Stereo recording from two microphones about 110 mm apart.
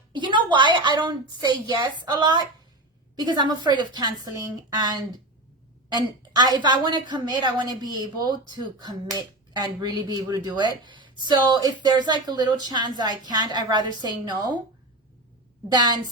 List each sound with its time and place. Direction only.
0.1 s a woman's voice: 45° right (ahead or behind)
9.5 s a woman's voice: 40° right (ahead or behind)